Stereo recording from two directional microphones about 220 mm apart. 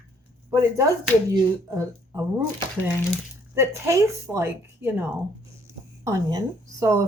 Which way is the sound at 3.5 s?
10° right (ahead or behind).